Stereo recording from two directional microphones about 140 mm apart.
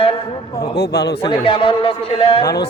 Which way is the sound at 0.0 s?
40° left (ahead or behind).